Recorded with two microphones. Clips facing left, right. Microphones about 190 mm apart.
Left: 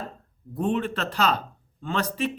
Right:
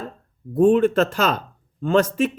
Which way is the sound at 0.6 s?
50° right (ahead or behind).